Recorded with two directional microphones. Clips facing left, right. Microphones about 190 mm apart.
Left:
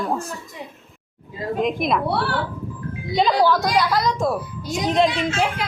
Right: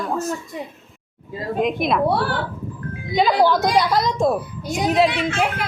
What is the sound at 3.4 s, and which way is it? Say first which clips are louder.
Speech: right 1 dB; 20° right (ahead or behind).